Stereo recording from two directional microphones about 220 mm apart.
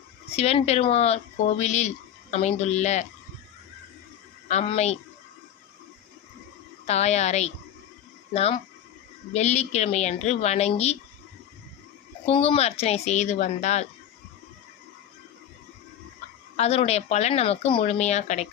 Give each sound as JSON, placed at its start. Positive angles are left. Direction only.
{"t": 0.3, "sound": "a woman's voice", "side_deg": 30}
{"t": 4.4, "sound": "speech", "side_deg": 30}
{"t": 6.8, "sound": "a woman's voice", "side_deg": 30}
{"t": 12.2, "sound": "a woman's voice", "side_deg": 25}
{"t": 16.6, "sound": "a woman's voice", "side_deg": 30}